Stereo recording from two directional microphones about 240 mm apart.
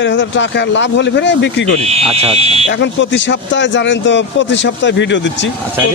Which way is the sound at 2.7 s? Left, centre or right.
Left.